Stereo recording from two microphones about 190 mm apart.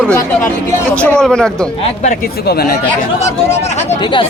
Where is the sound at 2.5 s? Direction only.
55° left (ahead or behind).